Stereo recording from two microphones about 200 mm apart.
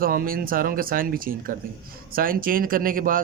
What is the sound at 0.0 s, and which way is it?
Speech, 45° right (ahead or behind).